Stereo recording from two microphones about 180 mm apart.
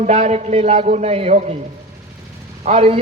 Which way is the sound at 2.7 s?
35° right (ahead or behind).